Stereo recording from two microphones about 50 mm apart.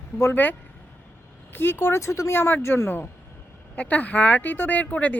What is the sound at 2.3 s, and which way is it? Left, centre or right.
Speech, left.